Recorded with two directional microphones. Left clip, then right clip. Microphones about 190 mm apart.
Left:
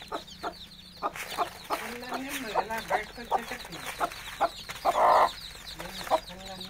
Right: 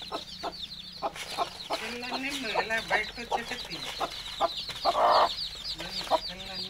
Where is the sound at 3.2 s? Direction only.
20° left (ahead or behind).